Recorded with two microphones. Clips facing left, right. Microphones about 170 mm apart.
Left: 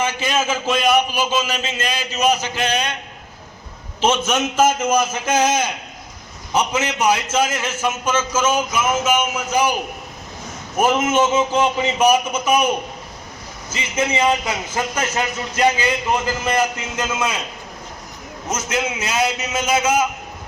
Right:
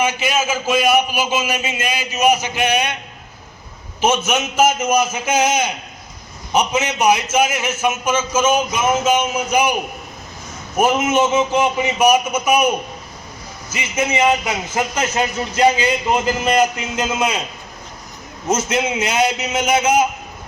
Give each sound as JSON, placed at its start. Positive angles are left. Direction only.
{"t": 0.0, "sound": "a man's voice", "side_deg": -10}
{"t": 4.3, "sound": "a man's voice", "side_deg": -10}
{"t": 8.7, "sound": "a man's voice", "side_deg": -25}
{"t": 10.8, "sound": "a man's voice", "side_deg": -10}
{"t": 14.1, "sound": "a man's voice", "side_deg": -15}
{"t": 18.4, "sound": "a man's voice", "side_deg": -20}